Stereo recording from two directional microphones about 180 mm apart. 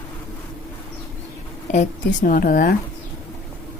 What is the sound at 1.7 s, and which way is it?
Speech, 45° left (ahead or behind).